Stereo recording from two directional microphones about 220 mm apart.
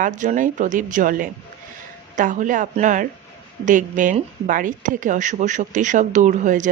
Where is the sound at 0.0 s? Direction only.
35° right (ahead or behind).